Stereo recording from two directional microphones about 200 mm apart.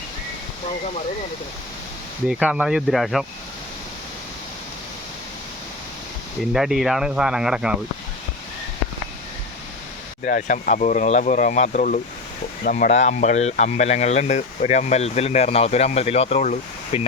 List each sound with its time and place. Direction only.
2.2 s speech: 5° right (ahead or behind)
6.5 s speech: centre (ahead or behind)
10.2 s speech: 40° left (ahead or behind)